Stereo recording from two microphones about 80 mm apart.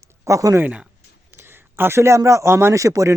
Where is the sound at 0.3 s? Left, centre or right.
Right.